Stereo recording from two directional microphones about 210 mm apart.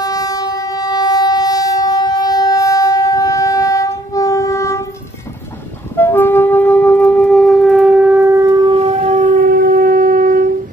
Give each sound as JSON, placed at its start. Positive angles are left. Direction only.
{"t": 0.0, "sound": "train", "side_deg": 15}
{"t": 5.9, "sound": "wind instrument", "side_deg": 10}
{"t": 8.7, "sound": "shofar", "side_deg": -30}